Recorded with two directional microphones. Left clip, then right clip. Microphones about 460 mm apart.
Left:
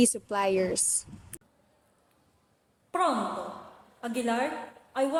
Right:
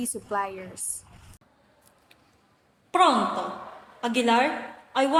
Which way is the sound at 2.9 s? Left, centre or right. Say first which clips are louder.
Right 7 dB; left.